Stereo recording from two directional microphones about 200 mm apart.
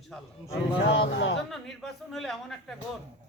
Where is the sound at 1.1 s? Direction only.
65° left (ahead or behind).